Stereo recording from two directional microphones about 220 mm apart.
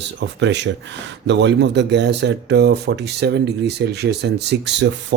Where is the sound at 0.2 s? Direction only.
55° right (ahead or behind).